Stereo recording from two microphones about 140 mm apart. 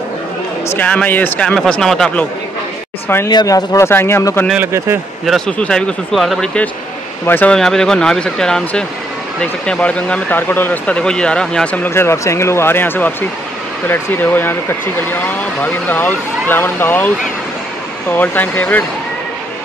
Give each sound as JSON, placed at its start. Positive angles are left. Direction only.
{"t": 0.7, "sound": "speech", "side_deg": 10}
{"t": 3.3, "sound": "speech", "side_deg": 30}
{"t": 4.6, "sound": "a man's voice", "side_deg": -20}
{"t": 5.2, "sound": "speech", "side_deg": 5}
{"t": 14.1, "sound": "speech", "side_deg": 15}
{"t": 18.1, "sound": "speech", "side_deg": 10}